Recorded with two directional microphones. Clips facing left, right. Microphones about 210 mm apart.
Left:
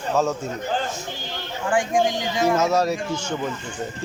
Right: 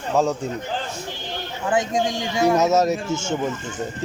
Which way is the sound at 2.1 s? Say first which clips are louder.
Right 2 dB; 25° right (ahead or behind).